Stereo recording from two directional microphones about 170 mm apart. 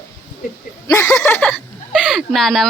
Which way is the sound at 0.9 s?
15° left (ahead or behind).